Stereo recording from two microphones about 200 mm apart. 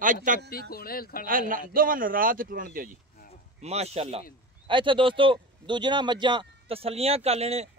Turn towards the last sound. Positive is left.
turn(degrees=-30)  # may be behind; listen again after turning